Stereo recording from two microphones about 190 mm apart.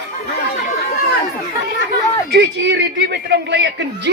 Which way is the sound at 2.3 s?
65° right (ahead or behind).